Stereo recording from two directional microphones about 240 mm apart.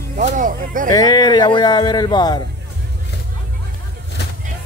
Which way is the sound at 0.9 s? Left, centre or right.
Centre.